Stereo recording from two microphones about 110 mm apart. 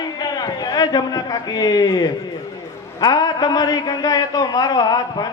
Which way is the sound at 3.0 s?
40° left (ahead or behind).